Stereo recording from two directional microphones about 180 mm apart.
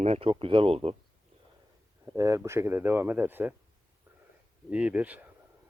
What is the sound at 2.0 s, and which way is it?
Speech, 15° right (ahead or behind).